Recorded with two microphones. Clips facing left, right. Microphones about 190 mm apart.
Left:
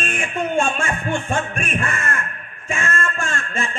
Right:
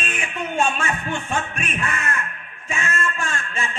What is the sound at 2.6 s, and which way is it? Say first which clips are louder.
Music: left 2 dB; 45° left (ahead or behind).